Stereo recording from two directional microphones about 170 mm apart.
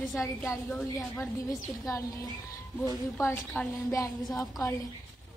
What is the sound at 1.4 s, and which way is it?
A woman's voice, 20° left (ahead or behind).